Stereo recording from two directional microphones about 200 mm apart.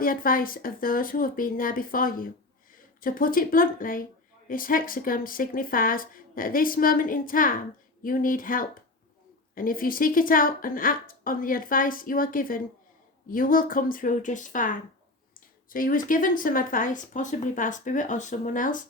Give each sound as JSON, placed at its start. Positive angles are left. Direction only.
{"t": 0.0, "sound": "speech", "side_deg": 45}